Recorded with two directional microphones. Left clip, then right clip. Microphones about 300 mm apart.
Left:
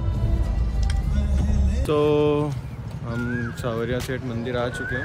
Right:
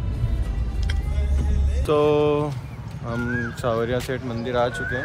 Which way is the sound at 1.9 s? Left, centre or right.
Centre.